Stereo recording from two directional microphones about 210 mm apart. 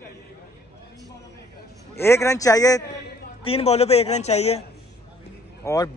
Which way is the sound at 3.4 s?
30° left (ahead or behind).